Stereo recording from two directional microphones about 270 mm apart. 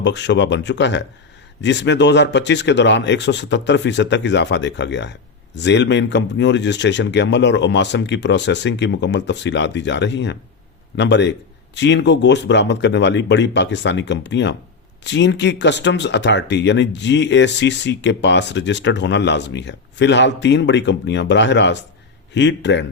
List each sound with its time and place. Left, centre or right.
0.0 s speech: left